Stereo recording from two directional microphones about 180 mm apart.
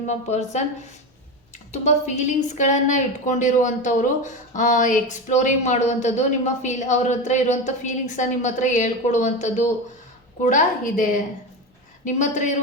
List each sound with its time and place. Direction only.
0.1 s a woman's voice: 40° left (ahead or behind)
1.7 s a woman's voice: 40° left (ahead or behind)